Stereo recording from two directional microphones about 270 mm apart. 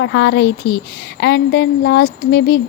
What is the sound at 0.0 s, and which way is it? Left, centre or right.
Speech, left.